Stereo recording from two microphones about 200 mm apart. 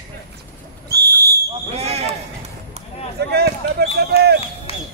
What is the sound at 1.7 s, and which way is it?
Basketball bounce, 30° right (ahead or behind).